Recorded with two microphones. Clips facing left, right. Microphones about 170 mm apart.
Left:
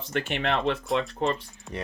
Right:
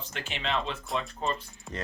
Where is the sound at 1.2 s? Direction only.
75° left (ahead or behind).